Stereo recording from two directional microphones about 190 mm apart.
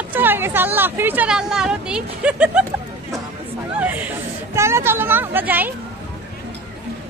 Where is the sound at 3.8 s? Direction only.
10° right (ahead or behind).